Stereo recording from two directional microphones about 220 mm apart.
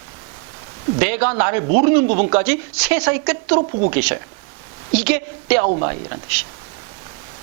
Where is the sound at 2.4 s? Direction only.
10° right (ahead or behind).